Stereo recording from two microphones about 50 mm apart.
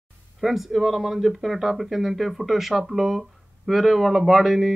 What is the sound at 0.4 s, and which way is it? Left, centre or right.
Speech, centre.